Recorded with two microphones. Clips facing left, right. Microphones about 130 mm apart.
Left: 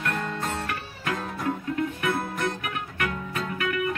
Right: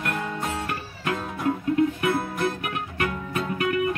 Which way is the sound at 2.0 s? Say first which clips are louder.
Right 3 dB; 5° right (ahead or behind).